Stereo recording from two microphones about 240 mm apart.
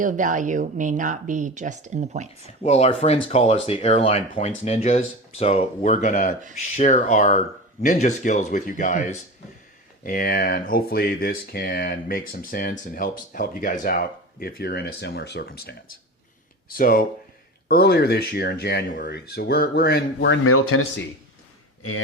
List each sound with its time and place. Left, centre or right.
0.0 s speech: right
2.6 s speech: left
16.7 s speech: left